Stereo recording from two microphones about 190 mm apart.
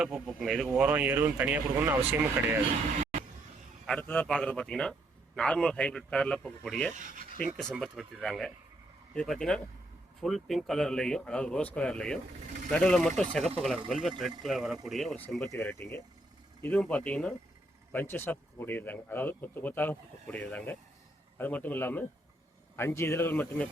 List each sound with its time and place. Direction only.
0.0 s a man's voice: centre (ahead or behind)
3.0 s a sound: 40° right (ahead or behind)
3.8 s a man's voice: 5° left (ahead or behind)
7.0 s speech: 45° right (ahead or behind)
7.7 s a man's voice: centre (ahead or behind)